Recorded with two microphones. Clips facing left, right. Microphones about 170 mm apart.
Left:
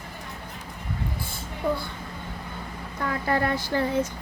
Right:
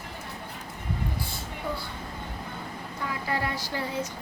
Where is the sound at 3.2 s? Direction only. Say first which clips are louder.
Left 6 dB; 55° left (ahead or behind).